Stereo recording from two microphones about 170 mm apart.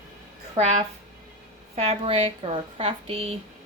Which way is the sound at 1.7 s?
35° right (ahead or behind).